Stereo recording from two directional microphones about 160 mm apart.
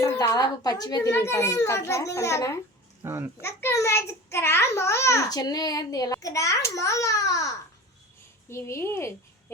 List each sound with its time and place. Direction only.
0.0 s a child's voice: 25° left (ahead or behind)
3.0 s a child's voice: 15° right (ahead or behind)
3.4 s a child's voice: 15° left (ahead or behind)